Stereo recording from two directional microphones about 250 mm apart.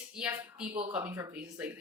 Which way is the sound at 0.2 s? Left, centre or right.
Centre.